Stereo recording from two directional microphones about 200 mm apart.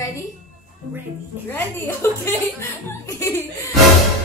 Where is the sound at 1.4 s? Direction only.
10° left (ahead or behind).